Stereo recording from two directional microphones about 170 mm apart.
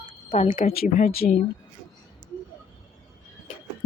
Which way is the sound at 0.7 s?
55° left (ahead or behind).